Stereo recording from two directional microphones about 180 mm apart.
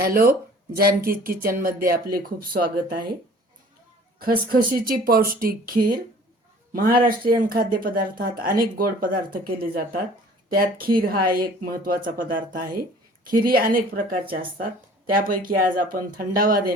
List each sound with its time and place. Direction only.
0.0 s speech: 55° right (ahead or behind)
4.2 s speech: 50° right (ahead or behind)
7.3 s speech: 50° right (ahead or behind)